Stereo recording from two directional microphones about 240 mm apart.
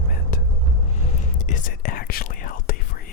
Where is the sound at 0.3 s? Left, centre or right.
Left.